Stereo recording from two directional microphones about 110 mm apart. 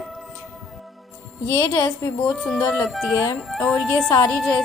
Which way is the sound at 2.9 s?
Centre (ahead or behind).